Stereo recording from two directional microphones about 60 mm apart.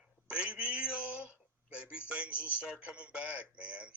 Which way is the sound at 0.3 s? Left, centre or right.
Centre.